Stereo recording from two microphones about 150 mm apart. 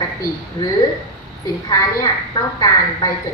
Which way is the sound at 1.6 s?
25° left (ahead or behind).